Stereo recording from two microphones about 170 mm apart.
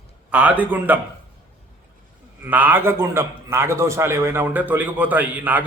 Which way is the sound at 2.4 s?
10° right (ahead or behind).